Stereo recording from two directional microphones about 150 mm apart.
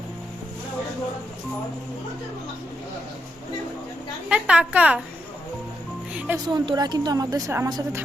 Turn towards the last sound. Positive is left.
turn(degrees=-15)  # may be behind; listen again after turning